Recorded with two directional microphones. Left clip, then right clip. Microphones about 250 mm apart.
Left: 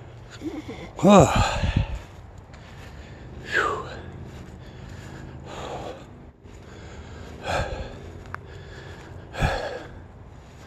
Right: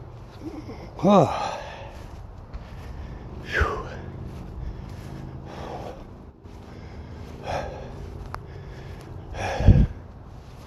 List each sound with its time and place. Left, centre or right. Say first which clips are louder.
0.6 s speech: left 3 dB; centre
3.4 s a sound: left 2 dB; centre
5.5 s gasp: left 2 dB; centre
7.2 s gasp: left 3 dB; centre